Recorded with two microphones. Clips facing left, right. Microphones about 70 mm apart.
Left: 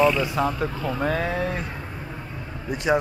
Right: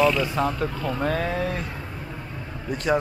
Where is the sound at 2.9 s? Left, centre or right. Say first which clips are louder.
Left 1 dB; centre.